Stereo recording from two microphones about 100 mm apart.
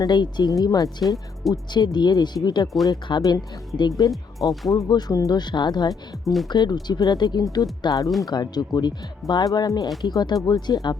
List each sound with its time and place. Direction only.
0.0 s speech: 45° left (ahead or behind)
1.0 s speech: centre (ahead or behind)
1.7 s speech: 45° left (ahead or behind)